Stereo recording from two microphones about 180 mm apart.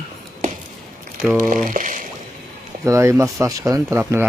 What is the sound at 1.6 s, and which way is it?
Speech, 45° right (ahead or behind).